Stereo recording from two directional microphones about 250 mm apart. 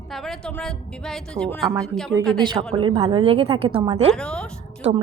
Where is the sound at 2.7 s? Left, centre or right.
Right.